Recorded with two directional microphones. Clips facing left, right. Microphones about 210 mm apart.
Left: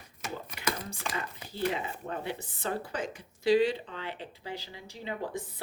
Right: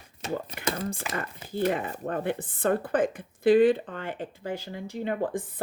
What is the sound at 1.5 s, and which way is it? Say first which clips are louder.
Speech: right 6 dB; 50° right (ahead or behind).